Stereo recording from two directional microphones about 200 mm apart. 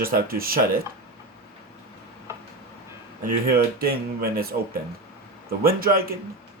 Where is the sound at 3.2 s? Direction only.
50° right (ahead or behind).